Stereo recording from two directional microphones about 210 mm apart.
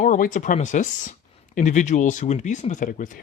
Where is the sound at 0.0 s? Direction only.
40° left (ahead or behind).